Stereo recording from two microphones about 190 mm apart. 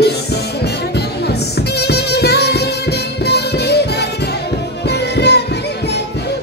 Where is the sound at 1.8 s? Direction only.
60° left (ahead or behind).